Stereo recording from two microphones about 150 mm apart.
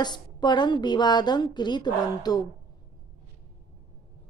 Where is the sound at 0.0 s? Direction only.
30° left (ahead or behind).